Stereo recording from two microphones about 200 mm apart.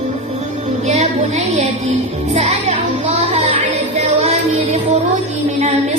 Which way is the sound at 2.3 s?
35° right (ahead or behind).